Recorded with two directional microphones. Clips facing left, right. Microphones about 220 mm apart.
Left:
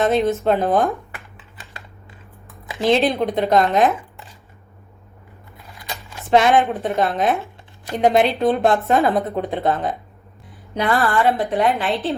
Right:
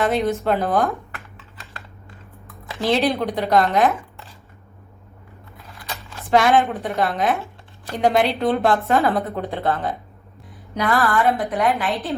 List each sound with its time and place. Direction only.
0.0 s speech: 20° left (ahead or behind)
0.4 s computer keyboard: 20° left (ahead or behind)
2.6 s speech: 15° left (ahead or behind)
6.1 s speech: 20° left (ahead or behind)